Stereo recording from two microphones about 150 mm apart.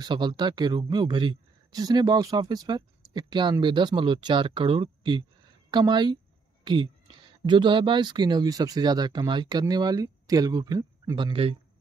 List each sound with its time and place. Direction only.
0.0 s speech: 30° right (ahead or behind)